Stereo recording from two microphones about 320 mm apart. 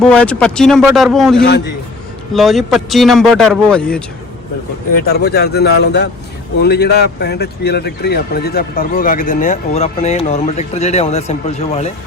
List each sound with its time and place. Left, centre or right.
0.0 s speech: centre
5.0 s a man's voice: left